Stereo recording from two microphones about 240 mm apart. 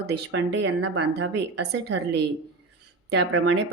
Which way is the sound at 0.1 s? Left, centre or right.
Right.